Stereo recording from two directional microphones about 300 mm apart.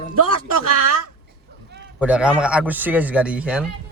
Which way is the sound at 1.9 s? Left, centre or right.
Centre.